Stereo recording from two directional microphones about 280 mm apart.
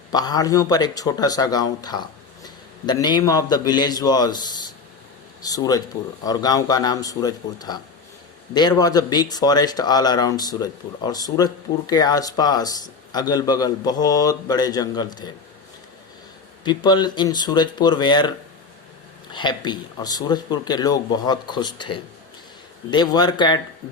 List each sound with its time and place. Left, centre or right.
0.1 s speech: centre
16.6 s speech: centre
19.3 s speech: centre